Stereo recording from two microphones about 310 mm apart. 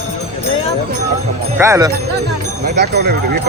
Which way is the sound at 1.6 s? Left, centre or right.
Centre.